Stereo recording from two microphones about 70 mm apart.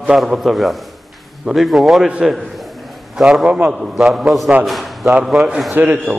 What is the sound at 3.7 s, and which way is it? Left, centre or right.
A man's voice, centre.